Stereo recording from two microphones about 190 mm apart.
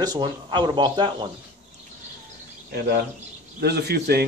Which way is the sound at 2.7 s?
60° right (ahead or behind).